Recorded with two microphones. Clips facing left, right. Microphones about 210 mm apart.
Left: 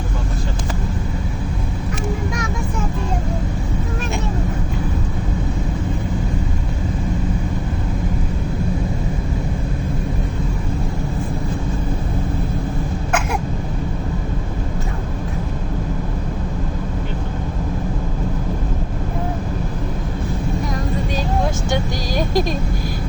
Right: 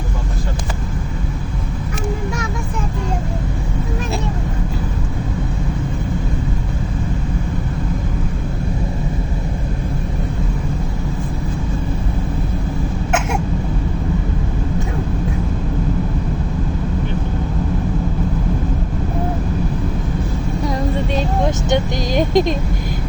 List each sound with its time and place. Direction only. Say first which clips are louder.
21.2 s vehicle: right 2 dB; 20° right (ahead or behind)